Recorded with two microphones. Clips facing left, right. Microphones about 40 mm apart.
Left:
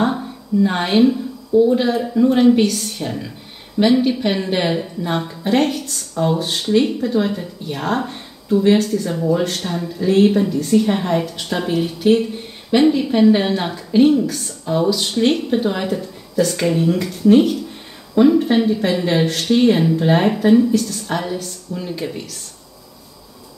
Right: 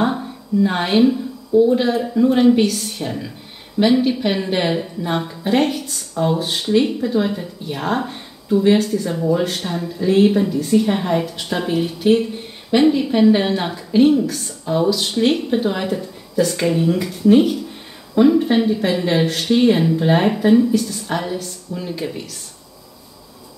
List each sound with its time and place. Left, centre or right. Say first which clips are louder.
0.0 s a woman's voice: even; centre